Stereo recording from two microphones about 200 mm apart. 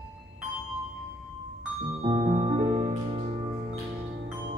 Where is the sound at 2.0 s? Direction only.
35° right (ahead or behind).